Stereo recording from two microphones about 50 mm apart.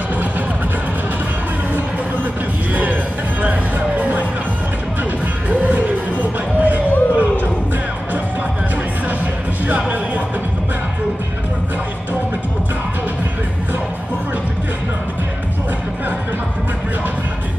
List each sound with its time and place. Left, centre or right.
2.7 s music: right
6.6 s a sound: right
9.2 s music: right